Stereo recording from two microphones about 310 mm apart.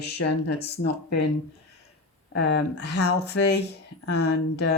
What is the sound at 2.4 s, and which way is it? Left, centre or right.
Speech, left.